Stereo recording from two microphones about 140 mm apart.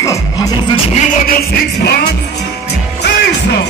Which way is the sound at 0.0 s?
20° left (ahead or behind).